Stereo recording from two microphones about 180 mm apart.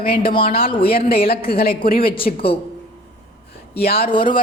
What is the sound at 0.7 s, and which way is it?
Speech, 30° left (ahead or behind).